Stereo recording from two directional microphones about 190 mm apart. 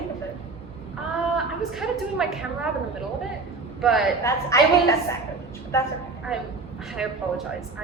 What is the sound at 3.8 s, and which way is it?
Speech, centre (ahead or behind).